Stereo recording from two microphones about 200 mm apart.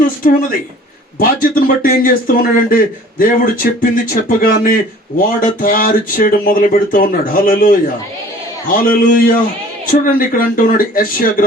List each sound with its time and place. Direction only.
0.2 s speech: 45° left (ahead or behind)